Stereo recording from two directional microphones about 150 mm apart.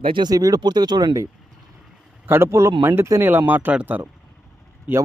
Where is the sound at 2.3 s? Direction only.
15° right (ahead or behind).